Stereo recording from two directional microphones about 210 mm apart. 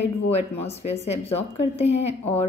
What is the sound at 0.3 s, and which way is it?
Speech, 30° left (ahead or behind).